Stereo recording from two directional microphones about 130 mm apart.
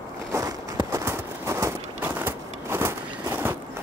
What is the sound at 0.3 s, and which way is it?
Walk, 30° right (ahead or behind).